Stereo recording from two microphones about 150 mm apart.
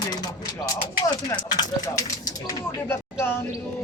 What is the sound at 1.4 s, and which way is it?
Speech, 25° left (ahead or behind).